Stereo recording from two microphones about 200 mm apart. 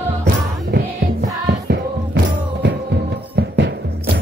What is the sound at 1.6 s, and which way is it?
Music, 60° right (ahead or behind).